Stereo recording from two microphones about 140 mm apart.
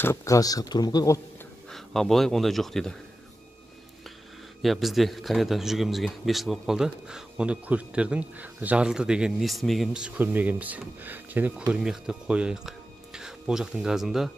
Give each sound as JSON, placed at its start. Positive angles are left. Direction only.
{"t": 0.0, "sound": "speech", "side_deg": 20}
{"t": 1.7, "sound": "a man's voice", "side_deg": 0}
{"t": 4.6, "sound": "a man's voice", "side_deg": 0}